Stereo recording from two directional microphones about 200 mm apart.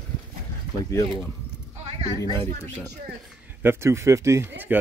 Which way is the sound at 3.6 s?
10° right (ahead or behind).